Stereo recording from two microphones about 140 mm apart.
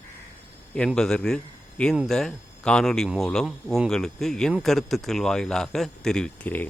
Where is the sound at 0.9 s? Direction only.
5° left (ahead or behind).